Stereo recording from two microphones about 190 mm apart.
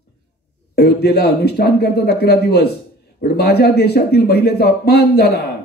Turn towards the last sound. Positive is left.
turn(degrees=60)  # may be behind; listen again after turning